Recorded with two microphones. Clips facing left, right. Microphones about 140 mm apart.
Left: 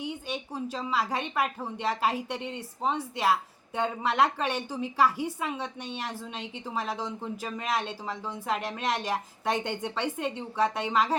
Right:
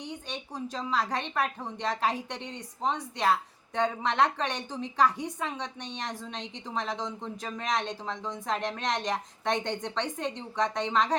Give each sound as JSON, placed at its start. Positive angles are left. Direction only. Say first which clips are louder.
{"t": 0.0, "sound": "a woman's voice", "louder": "left 4 dB", "side_deg": 10}